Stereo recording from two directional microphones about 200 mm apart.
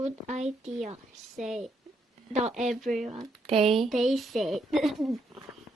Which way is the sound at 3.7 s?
Centre (ahead or behind).